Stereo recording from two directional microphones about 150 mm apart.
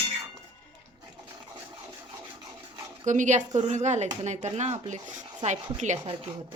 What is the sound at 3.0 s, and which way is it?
A woman's voice, 55° right (ahead or behind).